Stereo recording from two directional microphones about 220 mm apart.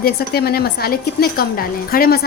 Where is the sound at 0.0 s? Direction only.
45° left (ahead or behind).